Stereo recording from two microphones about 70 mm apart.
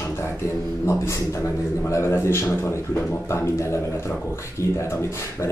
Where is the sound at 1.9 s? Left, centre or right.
Left.